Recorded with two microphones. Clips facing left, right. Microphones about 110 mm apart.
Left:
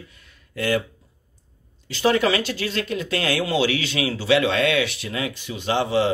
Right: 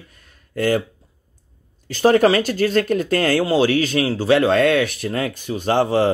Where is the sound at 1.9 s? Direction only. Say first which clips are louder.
Right 6 dB; 45° right (ahead or behind).